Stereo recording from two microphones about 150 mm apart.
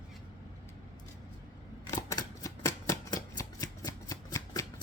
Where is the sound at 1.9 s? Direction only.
25° left (ahead or behind).